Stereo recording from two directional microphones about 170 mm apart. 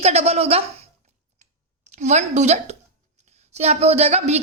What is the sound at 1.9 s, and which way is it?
Speech, 45° right (ahead or behind).